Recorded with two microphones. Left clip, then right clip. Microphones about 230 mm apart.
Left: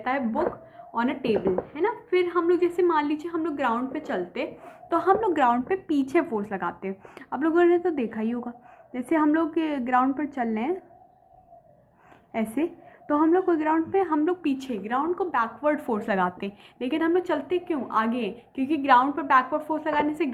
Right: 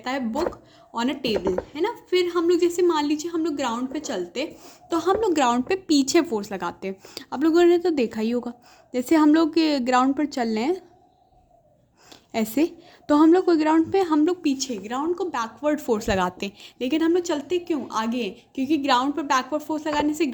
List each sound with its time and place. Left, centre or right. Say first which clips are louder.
0.9 s a woman's voice: even; right
12.3 s a woman's voice: right 4 dB; right